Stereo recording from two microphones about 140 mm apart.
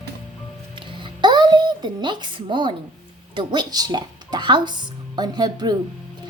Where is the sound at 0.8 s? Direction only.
35° right (ahead or behind).